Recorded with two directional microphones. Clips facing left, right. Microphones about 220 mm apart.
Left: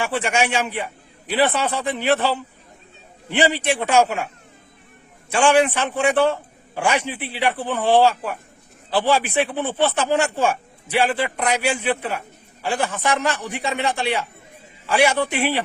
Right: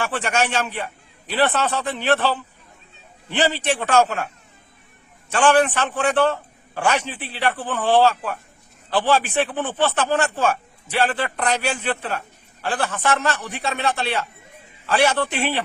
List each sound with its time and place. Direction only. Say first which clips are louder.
0.0 s speech: left 1 dB; 10° left (ahead or behind)
5.3 s speech: left 1 dB; 10° left (ahead or behind)